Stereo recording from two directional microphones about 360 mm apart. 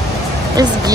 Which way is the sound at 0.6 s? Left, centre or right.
Centre.